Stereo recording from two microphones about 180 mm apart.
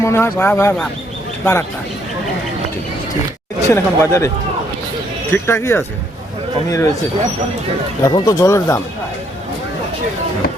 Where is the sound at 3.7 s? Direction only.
15° left (ahead or behind).